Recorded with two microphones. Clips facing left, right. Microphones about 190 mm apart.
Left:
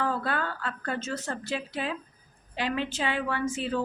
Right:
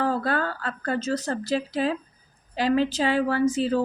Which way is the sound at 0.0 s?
40° right (ahead or behind).